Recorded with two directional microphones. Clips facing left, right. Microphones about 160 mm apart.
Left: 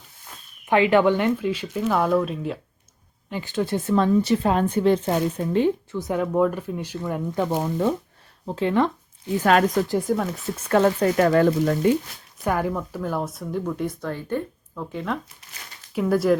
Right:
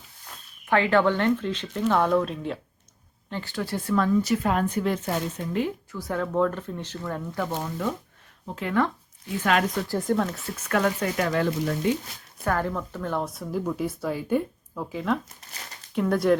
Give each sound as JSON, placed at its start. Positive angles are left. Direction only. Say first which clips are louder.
{"t": 0.7, "sound": "speech", "louder": "left 4 dB", "side_deg": 15}
{"t": 3.2, "sound": "speech", "louder": "left 5 dB", "side_deg": 15}
{"t": 9.4, "sound": "speech", "louder": "left 5 dB", "side_deg": 40}
{"t": 10.0, "sound": "speech", "louder": "left 1 dB", "side_deg": 5}
{"t": 10.7, "sound": "speech", "louder": "left 6 dB", "side_deg": 30}
{"t": 11.2, "sound": "speech", "louder": "left 7 dB", "side_deg": 45}
{"t": 12.5, "sound": "speech", "louder": "left 2 dB", "side_deg": 10}